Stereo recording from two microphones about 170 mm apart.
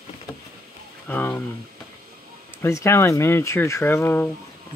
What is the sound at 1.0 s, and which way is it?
Speech, 10° left (ahead or behind).